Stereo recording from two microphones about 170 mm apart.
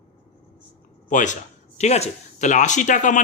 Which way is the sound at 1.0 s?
50° left (ahead or behind).